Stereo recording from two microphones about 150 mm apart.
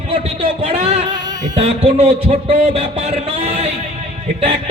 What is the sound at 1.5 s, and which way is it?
Speech, 45° right (ahead or behind).